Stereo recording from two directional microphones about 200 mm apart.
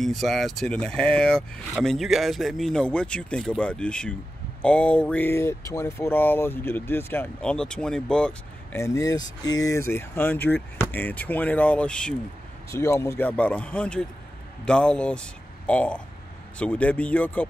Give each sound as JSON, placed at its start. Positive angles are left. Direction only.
{"t": 0.0, "sound": "a man's voice", "side_deg": 0}